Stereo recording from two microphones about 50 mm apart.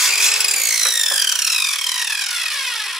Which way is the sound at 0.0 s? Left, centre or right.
Centre.